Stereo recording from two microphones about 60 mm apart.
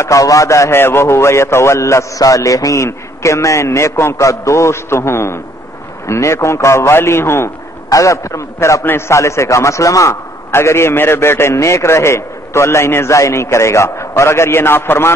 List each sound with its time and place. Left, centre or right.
0.0 s a man's voice: left
0.7 s a man's voice: left
2.8 s a man's voice: left
7.9 s a man's voice: left
8.8 s a man's voice: left
10.5 s a man's voice: left